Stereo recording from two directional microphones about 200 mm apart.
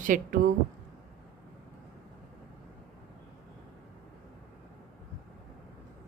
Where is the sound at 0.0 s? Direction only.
40° right (ahead or behind).